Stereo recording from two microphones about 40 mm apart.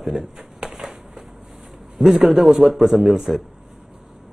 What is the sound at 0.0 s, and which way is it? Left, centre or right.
Speech, centre.